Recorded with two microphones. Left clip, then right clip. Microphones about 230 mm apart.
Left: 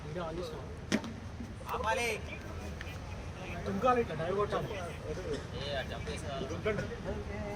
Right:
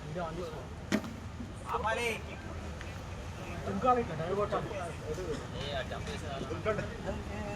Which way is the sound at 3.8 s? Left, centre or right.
Left.